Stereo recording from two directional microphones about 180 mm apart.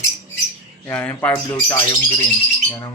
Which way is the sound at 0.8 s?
10° left (ahead or behind).